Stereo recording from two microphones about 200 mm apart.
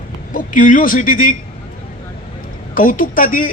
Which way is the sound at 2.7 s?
45° left (ahead or behind).